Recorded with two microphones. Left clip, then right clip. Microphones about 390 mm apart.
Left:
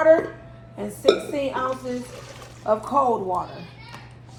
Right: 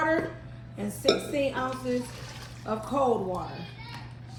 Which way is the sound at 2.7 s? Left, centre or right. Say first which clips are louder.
Left 11 dB; centre.